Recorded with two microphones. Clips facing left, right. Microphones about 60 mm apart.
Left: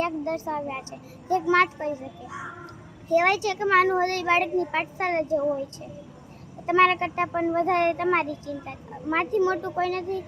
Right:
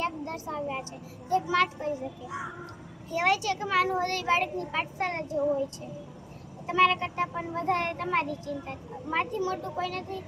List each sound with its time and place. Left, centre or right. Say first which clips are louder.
0.0 s a woman's voice: left 5 dB; left
3.1 s a child's voice: left 5 dB; left
6.7 s a child's voice: left 4 dB; left